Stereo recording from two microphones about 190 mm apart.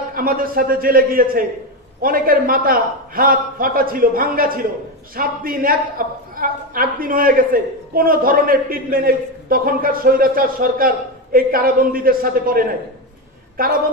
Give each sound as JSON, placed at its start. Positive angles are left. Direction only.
{"t": 0.1, "sound": "a woman's voice", "side_deg": -50}